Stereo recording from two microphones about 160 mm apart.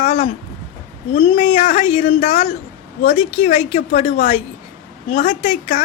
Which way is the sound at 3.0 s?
40° left (ahead or behind).